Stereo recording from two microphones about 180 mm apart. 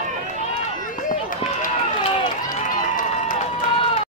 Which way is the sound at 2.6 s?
45° left (ahead or behind).